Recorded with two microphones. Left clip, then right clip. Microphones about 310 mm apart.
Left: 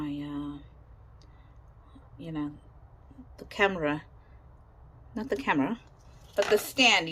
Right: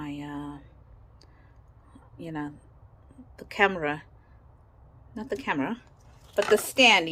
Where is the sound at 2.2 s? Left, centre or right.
Centre.